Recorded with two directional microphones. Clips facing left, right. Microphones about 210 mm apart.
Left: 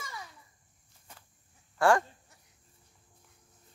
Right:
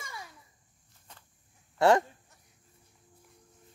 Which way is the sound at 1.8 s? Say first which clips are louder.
Right 2 dB; 20° right (ahead or behind).